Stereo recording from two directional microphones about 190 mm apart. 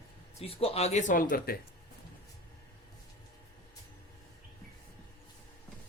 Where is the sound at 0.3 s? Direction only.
30° left (ahead or behind).